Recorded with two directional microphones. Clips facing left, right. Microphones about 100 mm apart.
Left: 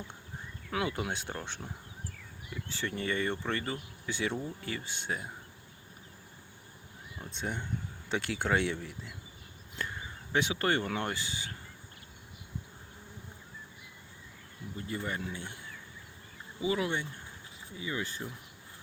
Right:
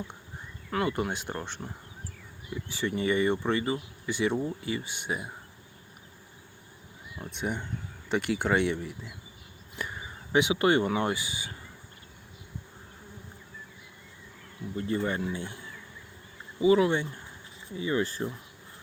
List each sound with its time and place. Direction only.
0.7 s speech: centre (ahead or behind)
7.3 s speech: 5° right (ahead or behind)
10.3 s speech: 15° right (ahead or behind)
14.8 s speech: 35° right (ahead or behind)
16.6 s speech: 30° right (ahead or behind)